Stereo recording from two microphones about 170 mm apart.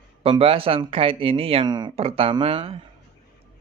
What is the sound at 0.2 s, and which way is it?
Speech, 35° right (ahead or behind).